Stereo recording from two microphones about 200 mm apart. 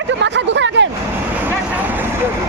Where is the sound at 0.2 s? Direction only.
65° right (ahead or behind).